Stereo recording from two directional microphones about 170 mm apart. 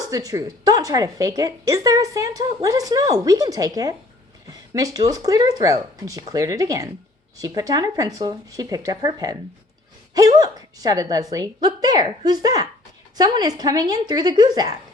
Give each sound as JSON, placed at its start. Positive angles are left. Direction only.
{"t": 0.0, "sound": "a woman's voice", "side_deg": -20}